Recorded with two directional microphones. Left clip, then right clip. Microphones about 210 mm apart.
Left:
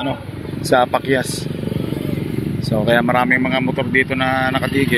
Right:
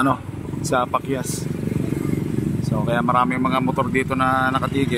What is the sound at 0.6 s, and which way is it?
Speech, 10° left (ahead or behind).